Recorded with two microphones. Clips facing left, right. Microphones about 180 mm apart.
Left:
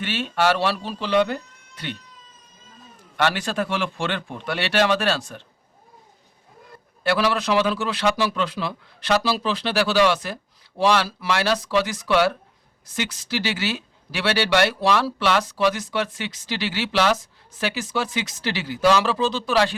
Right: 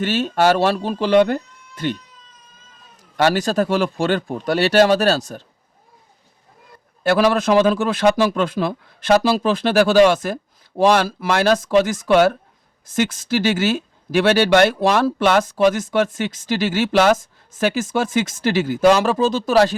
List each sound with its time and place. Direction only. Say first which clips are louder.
0.0 s speech: right 5 dB; 40° right (ahead or behind)
3.2 s speech: right 6 dB; 40° right (ahead or behind)
7.0 s speech: right 6 dB; 45° right (ahead or behind)